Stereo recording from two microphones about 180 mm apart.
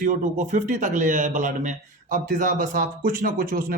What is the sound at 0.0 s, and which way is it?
Speech, 45° right (ahead or behind).